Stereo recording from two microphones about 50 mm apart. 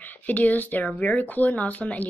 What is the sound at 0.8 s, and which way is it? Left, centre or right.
Speech, left.